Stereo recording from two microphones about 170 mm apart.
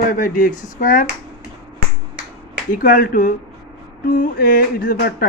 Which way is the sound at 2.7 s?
50° left (ahead or behind).